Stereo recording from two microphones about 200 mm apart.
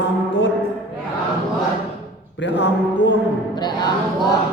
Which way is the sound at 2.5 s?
65° left (ahead or behind).